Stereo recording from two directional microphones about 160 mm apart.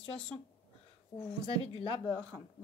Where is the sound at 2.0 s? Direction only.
15° left (ahead or behind).